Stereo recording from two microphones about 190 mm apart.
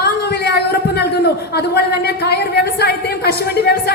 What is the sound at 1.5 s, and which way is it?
A woman's voice, 55° left (ahead or behind).